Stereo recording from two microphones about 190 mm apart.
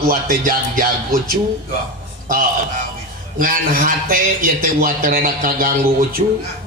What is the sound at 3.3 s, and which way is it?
A man's voice, 45° right (ahead or behind).